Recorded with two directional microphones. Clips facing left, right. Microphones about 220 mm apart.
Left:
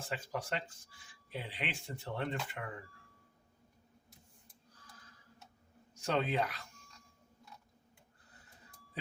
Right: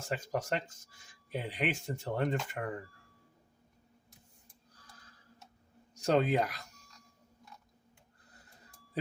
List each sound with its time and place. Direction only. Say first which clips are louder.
0.0 s speech: right 5 dB; 40° right (ahead or behind)
5.9 s speech: right 6 dB; 40° right (ahead or behind)